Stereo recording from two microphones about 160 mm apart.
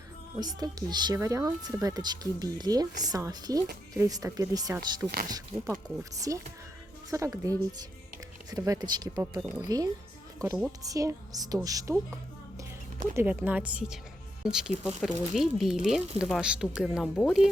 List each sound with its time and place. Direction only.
0.3 s speech: 25° right (ahead or behind)
10.4 s a woman's voice: 10° right (ahead or behind)
10.7 s speech: 20° right (ahead or behind)
13.1 s a woman's voice: 10° right (ahead or behind)